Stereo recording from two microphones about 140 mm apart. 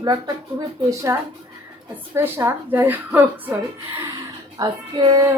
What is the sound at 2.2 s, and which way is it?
A woman's voice, 15° right (ahead or behind).